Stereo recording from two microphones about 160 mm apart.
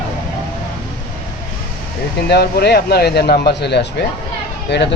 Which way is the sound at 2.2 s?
90° left.